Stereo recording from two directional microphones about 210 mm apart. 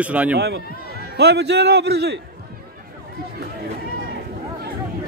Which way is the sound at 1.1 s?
50° right (ahead or behind).